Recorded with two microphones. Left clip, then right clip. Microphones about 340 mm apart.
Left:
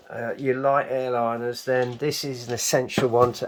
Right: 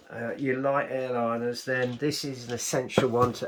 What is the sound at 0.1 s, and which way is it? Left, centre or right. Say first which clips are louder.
Speech: left 4 dB; centre.